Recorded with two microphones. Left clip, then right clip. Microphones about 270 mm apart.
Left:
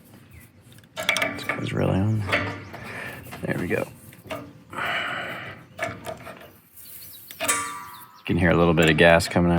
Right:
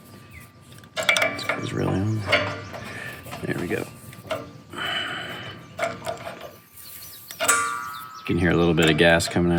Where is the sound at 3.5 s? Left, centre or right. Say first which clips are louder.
Left 2 dB; centre.